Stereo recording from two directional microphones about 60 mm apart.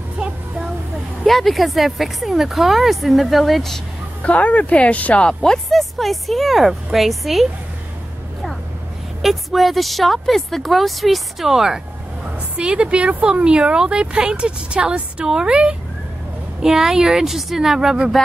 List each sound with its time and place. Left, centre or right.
0.2 s a sound: centre
1.2 s speech: centre
4.2 s speech: left; by 7.4 s centre
9.2 s speech: centre